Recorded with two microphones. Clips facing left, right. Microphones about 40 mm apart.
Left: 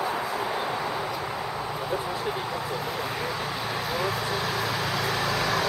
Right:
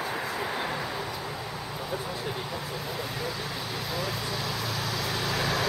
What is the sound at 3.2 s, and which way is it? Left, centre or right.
Vehicle, left.